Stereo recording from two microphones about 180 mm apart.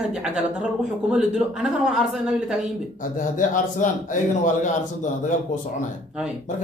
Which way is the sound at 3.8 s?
45° left (ahead or behind).